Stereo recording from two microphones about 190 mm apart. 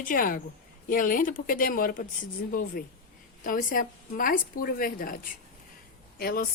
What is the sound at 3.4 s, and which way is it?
Speech, 45° left (ahead or behind).